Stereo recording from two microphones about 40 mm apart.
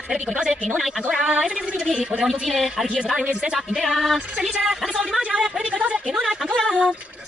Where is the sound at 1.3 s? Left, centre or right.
Right.